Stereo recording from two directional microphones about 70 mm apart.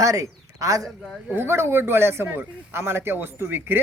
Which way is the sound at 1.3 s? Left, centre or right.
Right.